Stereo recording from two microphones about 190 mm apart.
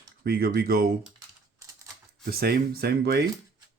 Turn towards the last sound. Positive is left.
turn(degrees=-55)  # may be behind; listen again after turning